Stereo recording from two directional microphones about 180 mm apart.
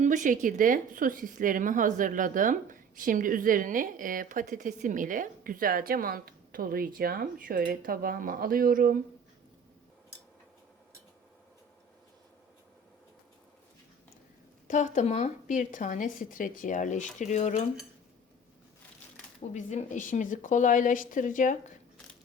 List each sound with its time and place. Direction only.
0.0 s speech: 45° right (ahead or behind)
14.7 s a woman's voice: 45° left (ahead or behind)
19.4 s a woman's voice: 40° left (ahead or behind)